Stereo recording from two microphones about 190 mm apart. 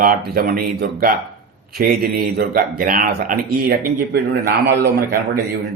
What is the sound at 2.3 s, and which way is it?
Speech, 50° right (ahead or behind).